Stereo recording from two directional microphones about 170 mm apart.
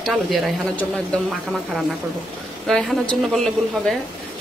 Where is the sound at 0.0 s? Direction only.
Centre (ahead or behind).